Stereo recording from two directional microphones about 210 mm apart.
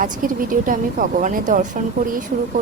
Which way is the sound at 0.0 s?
40° right (ahead or behind).